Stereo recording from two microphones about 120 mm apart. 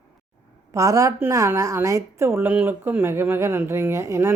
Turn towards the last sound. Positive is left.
turn(degrees=-20)  # may be behind; listen again after turning